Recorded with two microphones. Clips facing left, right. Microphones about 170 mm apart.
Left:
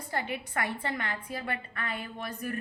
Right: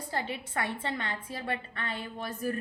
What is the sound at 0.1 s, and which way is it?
Speech, 25° right (ahead or behind).